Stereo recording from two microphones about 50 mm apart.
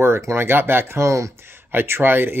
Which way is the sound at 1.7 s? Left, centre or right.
Right.